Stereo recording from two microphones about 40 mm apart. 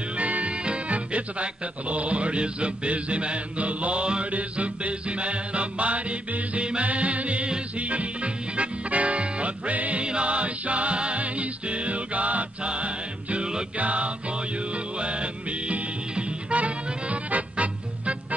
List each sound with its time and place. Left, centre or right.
0.2 s music: right